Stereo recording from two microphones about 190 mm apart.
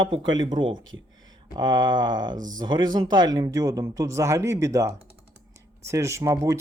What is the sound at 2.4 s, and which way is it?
Speech, 45° right (ahead or behind).